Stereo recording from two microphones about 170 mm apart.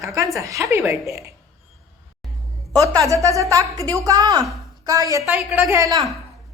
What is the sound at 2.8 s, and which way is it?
A woman's voice, 20° right (ahead or behind).